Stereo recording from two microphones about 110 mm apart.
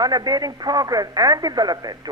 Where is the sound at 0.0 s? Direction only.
35° right (ahead or behind).